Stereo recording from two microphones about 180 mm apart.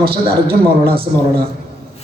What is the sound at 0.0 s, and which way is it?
A man's voice, 60° right (ahead or behind).